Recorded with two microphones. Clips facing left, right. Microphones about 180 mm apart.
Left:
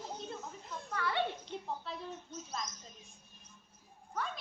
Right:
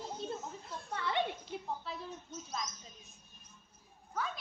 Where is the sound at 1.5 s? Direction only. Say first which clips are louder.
Even; centre (ahead or behind).